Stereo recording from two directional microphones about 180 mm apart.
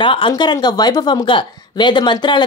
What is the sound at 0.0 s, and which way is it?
Speech, 30° left (ahead or behind).